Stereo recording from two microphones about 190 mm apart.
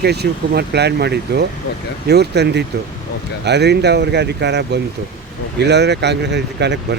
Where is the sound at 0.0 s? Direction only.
60° right (ahead or behind).